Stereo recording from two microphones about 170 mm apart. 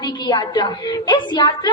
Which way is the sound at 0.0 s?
25° left (ahead or behind).